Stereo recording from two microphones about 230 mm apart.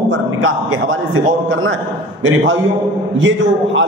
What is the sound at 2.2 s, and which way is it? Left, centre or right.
A man's voice, right.